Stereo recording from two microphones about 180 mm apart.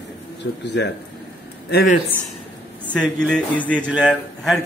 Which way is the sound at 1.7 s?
55° left (ahead or behind).